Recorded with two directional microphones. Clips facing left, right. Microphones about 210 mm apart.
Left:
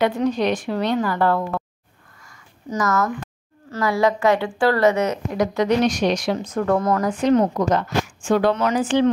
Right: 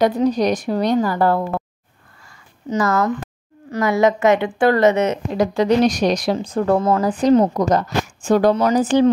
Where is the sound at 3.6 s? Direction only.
20° right (ahead or behind).